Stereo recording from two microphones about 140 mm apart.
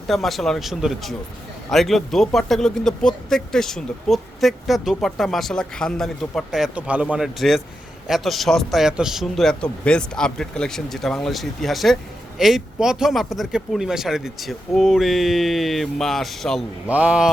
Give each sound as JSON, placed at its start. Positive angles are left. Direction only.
{"t": 0.1, "sound": "speech", "side_deg": 0}
{"t": 16.8, "sound": "speech", "side_deg": -10}